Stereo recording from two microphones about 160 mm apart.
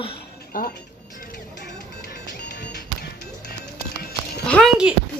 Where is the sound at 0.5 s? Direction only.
60° left (ahead or behind).